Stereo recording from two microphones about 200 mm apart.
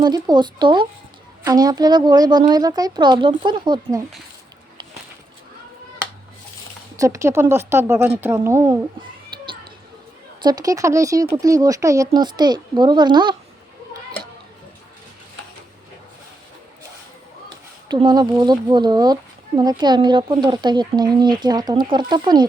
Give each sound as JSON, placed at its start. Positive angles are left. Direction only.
{"t": 0.0, "sound": "speech", "side_deg": -20}
{"t": 6.9, "sound": "speech", "side_deg": -15}
{"t": 9.3, "sound": "a sound", "side_deg": -25}
{"t": 10.4, "sound": "speech", "side_deg": -20}
{"t": 17.8, "sound": "speech", "side_deg": -20}